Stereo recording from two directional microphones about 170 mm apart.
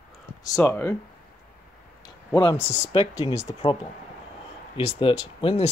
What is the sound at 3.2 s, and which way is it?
Speech, 35° left (ahead or behind).